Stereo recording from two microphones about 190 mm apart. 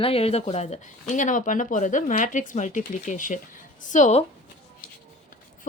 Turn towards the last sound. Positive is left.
turn(degrees=40)  # may be behind; listen again after turning